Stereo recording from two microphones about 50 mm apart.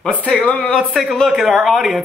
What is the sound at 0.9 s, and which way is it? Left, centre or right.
Speech, centre.